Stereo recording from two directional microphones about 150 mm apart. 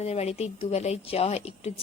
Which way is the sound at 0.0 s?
45° left (ahead or behind).